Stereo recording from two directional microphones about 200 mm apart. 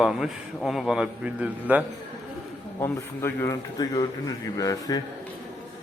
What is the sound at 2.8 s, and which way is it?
A man's voice, 10° left (ahead or behind).